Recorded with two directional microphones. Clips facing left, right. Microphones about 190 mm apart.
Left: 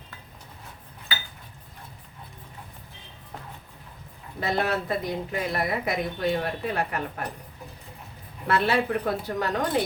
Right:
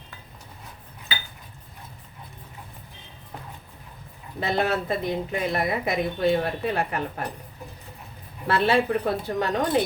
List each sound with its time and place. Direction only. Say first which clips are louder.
4.4 s speech: right 2 dB; 25° right (ahead or behind)
8.4 s speech: right 2 dB; 30° right (ahead or behind)